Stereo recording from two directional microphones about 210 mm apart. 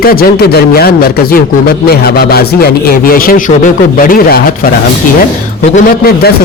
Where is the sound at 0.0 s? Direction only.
45° left (ahead or behind).